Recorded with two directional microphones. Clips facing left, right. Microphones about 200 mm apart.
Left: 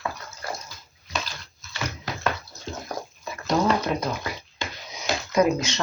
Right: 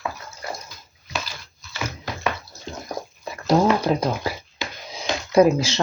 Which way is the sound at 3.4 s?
30° right (ahead or behind).